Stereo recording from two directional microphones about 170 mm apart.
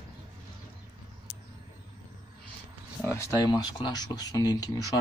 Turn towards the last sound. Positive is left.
turn(degrees=20)  # may be behind; listen again after turning